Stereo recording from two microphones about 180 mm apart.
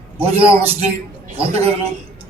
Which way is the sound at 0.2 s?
35° right (ahead or behind).